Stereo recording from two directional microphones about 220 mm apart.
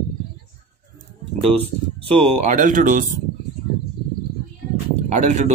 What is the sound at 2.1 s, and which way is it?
Speech, 35° right (ahead or behind).